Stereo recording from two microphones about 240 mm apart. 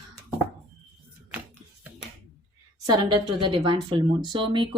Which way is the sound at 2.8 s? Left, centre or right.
Centre.